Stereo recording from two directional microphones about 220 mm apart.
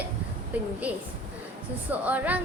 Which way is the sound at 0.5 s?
5° right (ahead or behind).